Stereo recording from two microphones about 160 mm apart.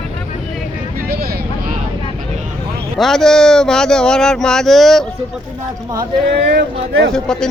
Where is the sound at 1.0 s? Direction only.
70° right (ahead or behind).